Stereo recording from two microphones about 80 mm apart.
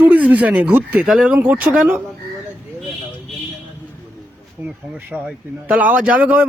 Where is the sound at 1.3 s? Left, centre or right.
Right.